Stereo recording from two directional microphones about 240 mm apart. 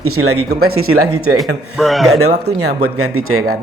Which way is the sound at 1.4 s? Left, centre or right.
Centre.